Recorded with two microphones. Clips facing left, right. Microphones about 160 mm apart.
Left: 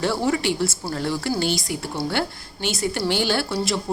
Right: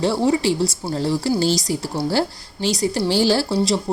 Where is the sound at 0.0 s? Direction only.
30° right (ahead or behind).